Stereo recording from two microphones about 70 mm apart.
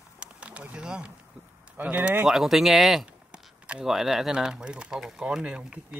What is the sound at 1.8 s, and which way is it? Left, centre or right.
Speech, right.